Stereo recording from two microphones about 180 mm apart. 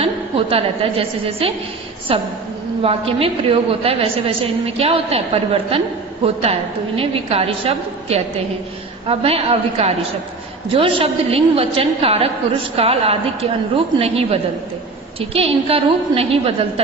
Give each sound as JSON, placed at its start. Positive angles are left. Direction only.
{"t": 0.0, "sound": "a woman's voice", "side_deg": -30}